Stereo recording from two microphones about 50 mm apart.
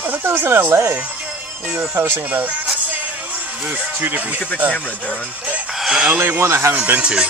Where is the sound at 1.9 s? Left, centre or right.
Right.